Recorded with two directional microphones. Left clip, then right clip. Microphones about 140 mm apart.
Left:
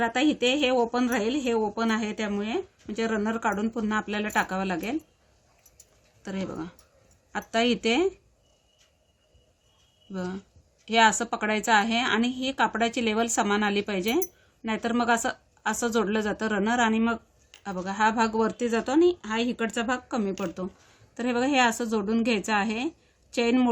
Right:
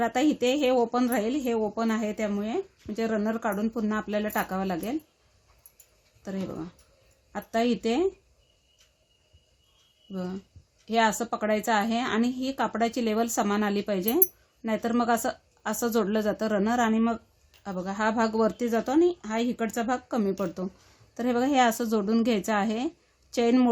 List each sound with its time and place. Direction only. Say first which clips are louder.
0.0 s speech: left 1 dB; 45° right (ahead or behind)
6.2 s speech: left 1 dB; 30° right (ahead or behind)
10.1 s a woman's voice: left 1 dB; 25° right (ahead or behind); by 23.6 s 45° right (ahead or behind)